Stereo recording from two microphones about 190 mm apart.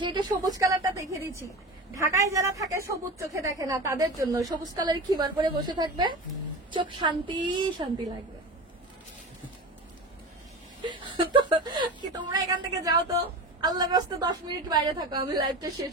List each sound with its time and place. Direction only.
0.0 s a woman's voice: 25° right (ahead or behind)
10.8 s a woman's voice: 25° right (ahead or behind)